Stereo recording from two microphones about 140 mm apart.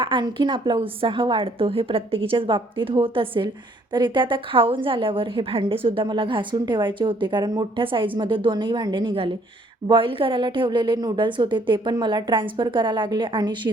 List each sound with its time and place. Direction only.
0.0 s a woman's voice: 35° right (ahead or behind)